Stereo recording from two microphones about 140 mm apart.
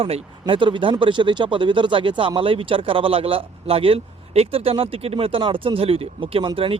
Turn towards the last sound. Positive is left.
turn(degrees=-40)  # may be behind; listen again after turning